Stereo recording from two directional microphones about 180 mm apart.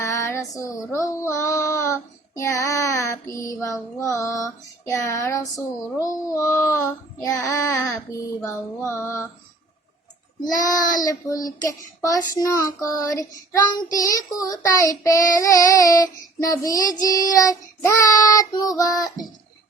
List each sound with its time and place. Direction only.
0.0 s child singing: 15° left (ahead or behind)
11.1 s child singing: 20° left (ahead or behind)